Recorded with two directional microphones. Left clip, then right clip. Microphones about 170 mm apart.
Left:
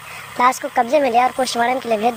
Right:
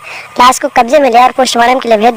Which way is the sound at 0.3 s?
35° right (ahead or behind).